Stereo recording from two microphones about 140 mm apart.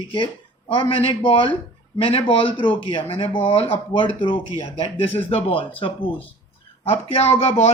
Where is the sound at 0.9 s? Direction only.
35° left (ahead or behind).